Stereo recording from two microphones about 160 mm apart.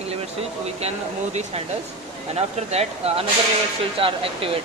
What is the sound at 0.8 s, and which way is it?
Speech, 45° right (ahead or behind).